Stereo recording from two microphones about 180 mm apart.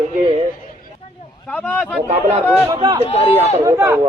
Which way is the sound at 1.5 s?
5° left (ahead or behind).